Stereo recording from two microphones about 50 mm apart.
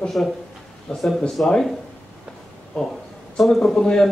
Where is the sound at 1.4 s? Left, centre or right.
Left.